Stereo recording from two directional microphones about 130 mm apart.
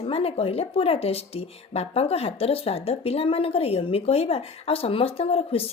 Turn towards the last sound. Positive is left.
turn(degrees=50)  # may be behind; listen again after turning